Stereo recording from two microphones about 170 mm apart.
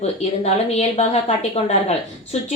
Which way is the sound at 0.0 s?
40° left (ahead or behind).